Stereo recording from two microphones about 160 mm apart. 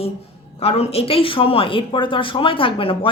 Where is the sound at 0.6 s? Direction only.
40° left (ahead or behind).